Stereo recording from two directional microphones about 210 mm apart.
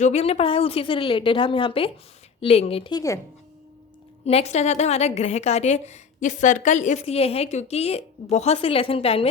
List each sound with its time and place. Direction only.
0.0 s a woman's voice: 30° left (ahead or behind)
4.3 s a woman's voice: 30° left (ahead or behind)